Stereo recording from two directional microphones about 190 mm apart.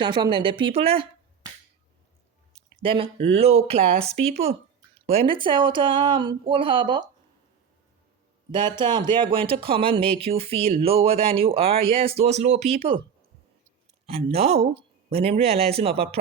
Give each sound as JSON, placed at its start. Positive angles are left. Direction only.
{"t": 0.0, "sound": "speech", "side_deg": -25}
{"t": 2.8, "sound": "speech", "side_deg": -30}
{"t": 8.5, "sound": "speech", "side_deg": -25}
{"t": 14.1, "sound": "speech", "side_deg": -30}